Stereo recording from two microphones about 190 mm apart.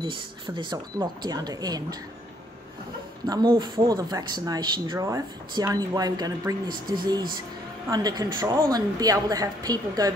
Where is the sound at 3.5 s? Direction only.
20° right (ahead or behind).